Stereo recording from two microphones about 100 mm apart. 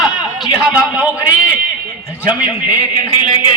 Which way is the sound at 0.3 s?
Centre (ahead or behind).